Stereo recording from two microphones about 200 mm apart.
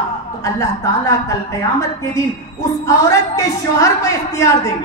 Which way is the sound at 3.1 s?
15° left (ahead or behind).